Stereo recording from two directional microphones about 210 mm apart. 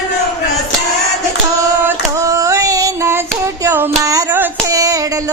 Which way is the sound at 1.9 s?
15° right (ahead or behind).